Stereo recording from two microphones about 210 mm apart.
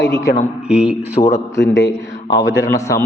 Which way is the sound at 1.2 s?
30° left (ahead or behind).